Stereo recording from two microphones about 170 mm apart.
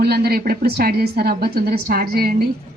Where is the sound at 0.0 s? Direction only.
60° right (ahead or behind).